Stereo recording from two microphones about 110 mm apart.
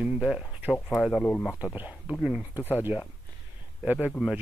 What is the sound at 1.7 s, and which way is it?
Speech, 15° right (ahead or behind).